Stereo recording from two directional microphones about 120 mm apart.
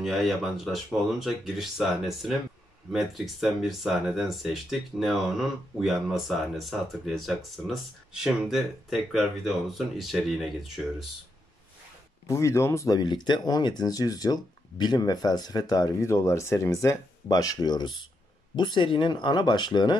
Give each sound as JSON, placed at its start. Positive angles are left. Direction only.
{"t": 0.0, "sound": "speech", "side_deg": 0}
{"t": 12.3, "sound": "speech", "side_deg": 25}